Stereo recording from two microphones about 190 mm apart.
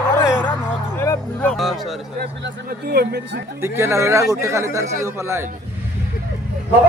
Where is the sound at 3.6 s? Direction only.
15° right (ahead or behind).